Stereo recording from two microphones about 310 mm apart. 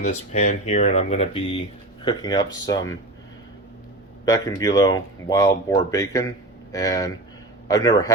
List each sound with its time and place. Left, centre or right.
0.1 s speech: left
4.3 s speech: centre